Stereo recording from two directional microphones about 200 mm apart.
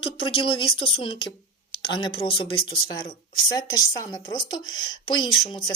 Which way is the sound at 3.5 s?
20° left (ahead or behind).